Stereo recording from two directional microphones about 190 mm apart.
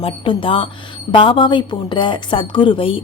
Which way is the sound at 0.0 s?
25° left (ahead or behind).